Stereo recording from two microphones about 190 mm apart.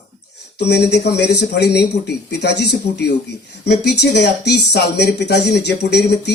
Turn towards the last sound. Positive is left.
turn(degrees=60)  # may be behind; listen again after turning